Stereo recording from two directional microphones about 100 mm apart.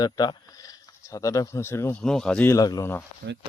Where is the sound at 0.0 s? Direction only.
40° left (ahead or behind); by 2.0 s 25° left (ahead or behind).